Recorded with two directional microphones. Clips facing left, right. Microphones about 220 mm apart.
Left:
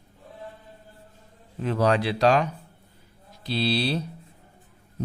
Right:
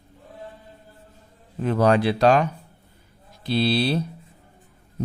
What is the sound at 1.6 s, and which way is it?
Speech, 50° right (ahead or behind).